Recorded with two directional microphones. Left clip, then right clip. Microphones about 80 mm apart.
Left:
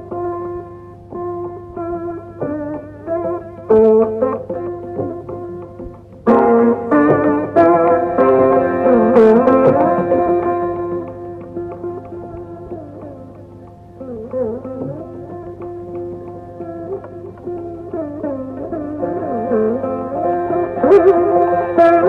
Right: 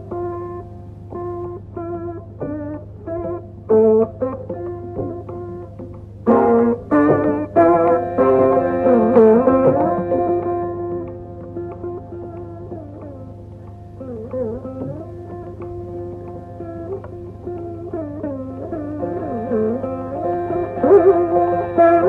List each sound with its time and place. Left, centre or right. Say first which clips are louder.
0.1 s music: left 3 dB; right
1.8 s music: left 4 dB; right
6.3 s music: left 3 dB; right
14.3 s music: left 4 dB; right
17.6 s music: left 2 dB; right